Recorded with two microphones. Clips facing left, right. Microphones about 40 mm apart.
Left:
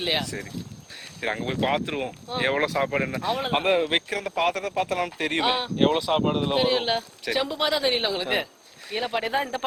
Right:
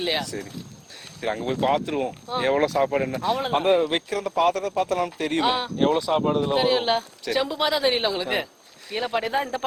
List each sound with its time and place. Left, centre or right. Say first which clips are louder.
0.0 s speech: right 1 dB; centre
1.2 s speech: right 2 dB; left
3.2 s speech: right 2 dB; centre
3.5 s speech: right 1 dB; centre; by 5.4 s left
5.4 s speech: right 2 dB; centre
5.7 s speech: left 2 dB; left
6.1 s speech: right 1 dB; left
6.6 s speech: right 2 dB; centre